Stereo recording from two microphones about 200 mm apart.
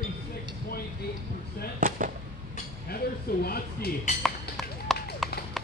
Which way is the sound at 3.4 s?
50° left (ahead or behind).